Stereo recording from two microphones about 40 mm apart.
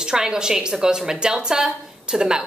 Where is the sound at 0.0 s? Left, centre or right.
Centre.